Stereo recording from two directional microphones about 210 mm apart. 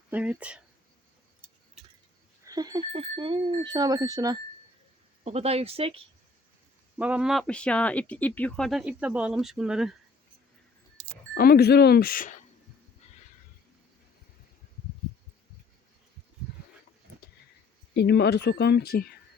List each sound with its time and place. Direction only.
0.1 s speech: 5° right (ahead or behind)
2.4 s speech: 15° right (ahead or behind)
5.2 s speech: 30° right (ahead or behind)
7.0 s speech: 5° right (ahead or behind)
11.3 s speech: 45° left (ahead or behind)
17.9 s speech: 50° left (ahead or behind)